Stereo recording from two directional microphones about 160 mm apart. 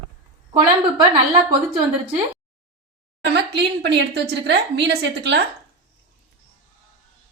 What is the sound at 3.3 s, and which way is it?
A woman's voice, 90° right.